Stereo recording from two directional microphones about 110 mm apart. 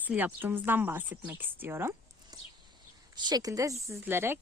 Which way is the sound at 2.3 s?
35° right (ahead or behind).